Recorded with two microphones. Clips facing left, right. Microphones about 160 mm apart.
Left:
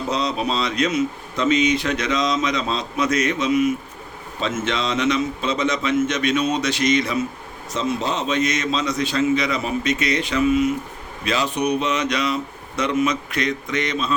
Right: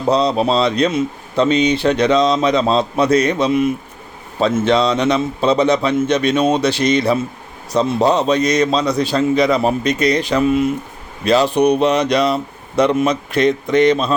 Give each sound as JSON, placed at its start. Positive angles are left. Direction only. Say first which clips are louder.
{"t": 0.1, "sound": "speech", "louder": "right 9 dB", "side_deg": -35}